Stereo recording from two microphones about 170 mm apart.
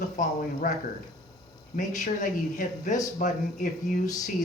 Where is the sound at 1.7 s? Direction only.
50° left (ahead or behind).